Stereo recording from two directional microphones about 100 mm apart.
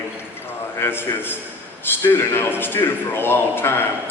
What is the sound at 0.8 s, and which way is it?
A man's voice, 20° left (ahead or behind).